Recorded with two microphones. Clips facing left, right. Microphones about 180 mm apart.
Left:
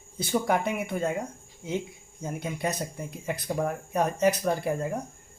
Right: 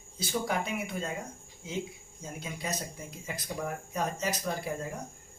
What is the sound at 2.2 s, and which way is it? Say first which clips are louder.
Speech: left 8 dB; 60° left (ahead or behind).